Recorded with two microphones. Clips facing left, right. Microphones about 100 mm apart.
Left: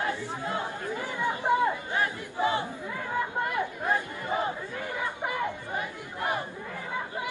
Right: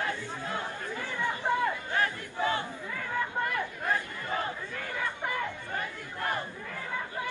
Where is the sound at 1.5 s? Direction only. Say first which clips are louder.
Left 4 dB; 15° left (ahead or behind).